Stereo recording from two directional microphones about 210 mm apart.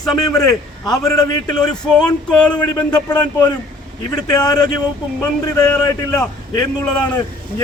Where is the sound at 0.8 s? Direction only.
15° left (ahead or behind).